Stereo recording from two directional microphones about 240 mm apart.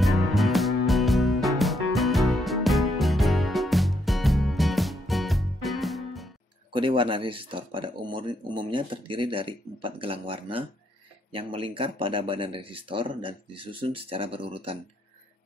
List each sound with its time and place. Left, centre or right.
0.0 s music: centre
6.7 s speech: right